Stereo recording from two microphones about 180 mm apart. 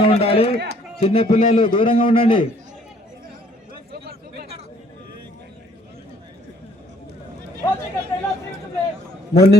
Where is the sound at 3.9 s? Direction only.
65° right (ahead or behind).